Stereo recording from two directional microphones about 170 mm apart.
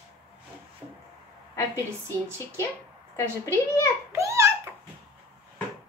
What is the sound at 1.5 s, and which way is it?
Speech, 15° left (ahead or behind).